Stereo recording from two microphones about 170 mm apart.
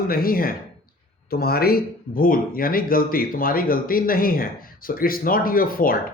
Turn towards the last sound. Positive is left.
turn(degrees=55)  # may be behind; listen again after turning